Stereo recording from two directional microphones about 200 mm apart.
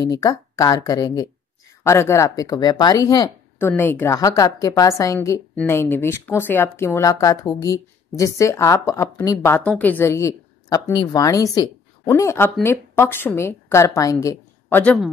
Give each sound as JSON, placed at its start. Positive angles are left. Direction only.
{"t": 0.0, "sound": "speech", "side_deg": 20}